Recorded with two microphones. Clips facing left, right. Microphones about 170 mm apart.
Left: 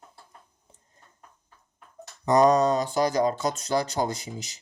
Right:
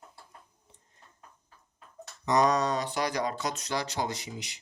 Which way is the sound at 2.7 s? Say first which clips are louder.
Left 6 dB; 40° left (ahead or behind).